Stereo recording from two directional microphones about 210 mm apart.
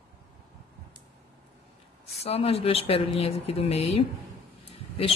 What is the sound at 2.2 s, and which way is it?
Speech, 30° left (ahead or behind).